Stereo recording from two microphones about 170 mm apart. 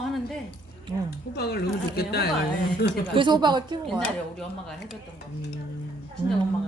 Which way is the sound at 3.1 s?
25° right (ahead or behind).